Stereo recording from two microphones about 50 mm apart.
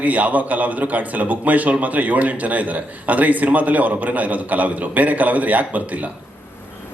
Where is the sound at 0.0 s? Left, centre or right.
Right.